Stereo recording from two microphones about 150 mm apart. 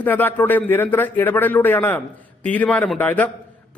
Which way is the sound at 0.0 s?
10° left (ahead or behind).